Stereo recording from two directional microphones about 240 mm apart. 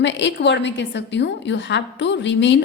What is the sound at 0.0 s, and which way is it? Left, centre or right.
A woman's voice, left.